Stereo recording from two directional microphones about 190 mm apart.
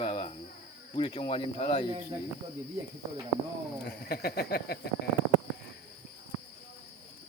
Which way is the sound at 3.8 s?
55° left (ahead or behind).